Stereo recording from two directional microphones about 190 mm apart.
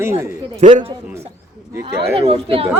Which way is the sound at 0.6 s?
40° right (ahead or behind).